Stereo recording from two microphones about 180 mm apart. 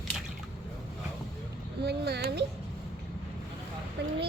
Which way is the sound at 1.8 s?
65° right (ahead or behind).